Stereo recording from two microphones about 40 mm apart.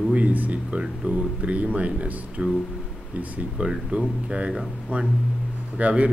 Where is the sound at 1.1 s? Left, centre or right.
Right.